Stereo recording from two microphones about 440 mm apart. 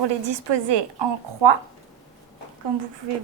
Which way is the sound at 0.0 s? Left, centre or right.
Right.